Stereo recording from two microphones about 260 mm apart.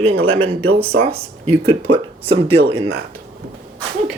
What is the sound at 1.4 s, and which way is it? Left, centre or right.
Speech, right.